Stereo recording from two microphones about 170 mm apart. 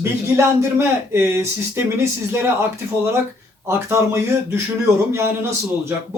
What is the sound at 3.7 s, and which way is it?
Speech, 15° right (ahead or behind).